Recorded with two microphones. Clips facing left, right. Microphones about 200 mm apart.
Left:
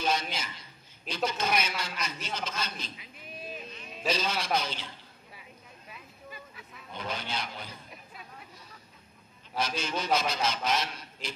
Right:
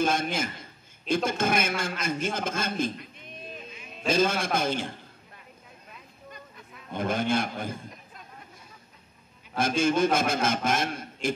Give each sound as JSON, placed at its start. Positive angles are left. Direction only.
{"t": 0.0, "sound": "a man's voice", "side_deg": -50}
{"t": 3.0, "sound": "a sound", "side_deg": 5}
{"t": 3.7, "sound": "a sound", "side_deg": -5}
{"t": 4.1, "sound": "a man's voice", "side_deg": -50}
{"t": 5.3, "sound": "vehicle", "side_deg": 5}
{"t": 6.9, "sound": "a man's voice", "side_deg": -50}
{"t": 7.9, "sound": "chatter", "side_deg": 5}
{"t": 9.6, "sound": "a man's voice", "side_deg": -50}